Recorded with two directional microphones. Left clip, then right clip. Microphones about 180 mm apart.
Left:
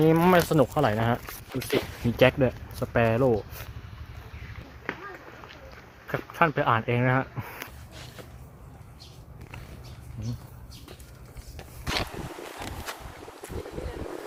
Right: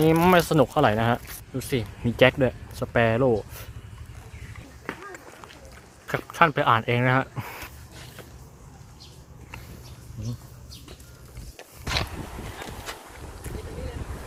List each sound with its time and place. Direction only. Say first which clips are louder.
0.0 s speech: right 2 dB; 20° right (ahead or behind)
0.4 s speech: right 2 dB; 5° right (ahead or behind)
0.7 s speech: right 4 dB; 20° right (ahead or behind)
6.1 s speech: right 4 dB; 20° right (ahead or behind)
11.5 s a sound: right 2 dB; 10° right (ahead or behind)